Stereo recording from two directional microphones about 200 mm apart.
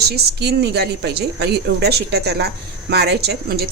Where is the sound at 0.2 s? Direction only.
55° right (ahead or behind).